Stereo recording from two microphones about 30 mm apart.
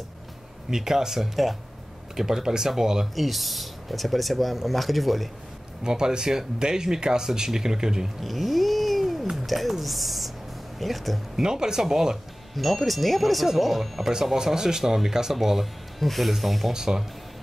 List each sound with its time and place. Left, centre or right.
0.7 s speech: centre
1.3 s speech: centre
2.1 s speech: centre
3.2 s speech: centre
5.9 s speech: right
8.2 s cat: centre
9.5 s speech: centre
11.4 s speech: right
12.5 s speech: centre
14.1 s speech: centre
15.6 s speech: centre
16.7 s speech: centre